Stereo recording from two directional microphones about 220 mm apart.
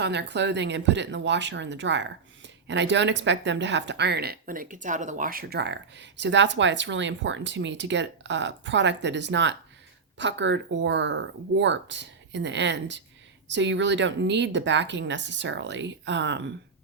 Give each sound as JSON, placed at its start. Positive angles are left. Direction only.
{"t": 0.0, "sound": "speech", "side_deg": -50}